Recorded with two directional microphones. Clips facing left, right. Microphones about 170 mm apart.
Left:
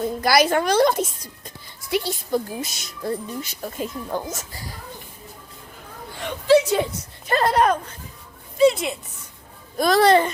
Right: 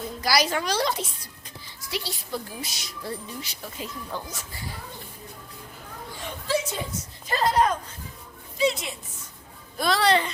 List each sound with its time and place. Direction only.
0.2 s speech: 55° left (ahead or behind)
6.1 s a sound: 70° left (ahead or behind)
7.3 s a woman's voice: 60° left (ahead or behind)
9.7 s speech: 45° left (ahead or behind)